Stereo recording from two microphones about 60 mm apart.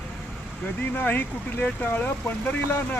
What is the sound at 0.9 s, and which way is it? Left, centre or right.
Speech, left.